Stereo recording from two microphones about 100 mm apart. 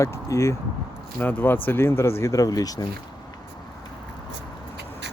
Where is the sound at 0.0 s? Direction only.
30° left (ahead or behind).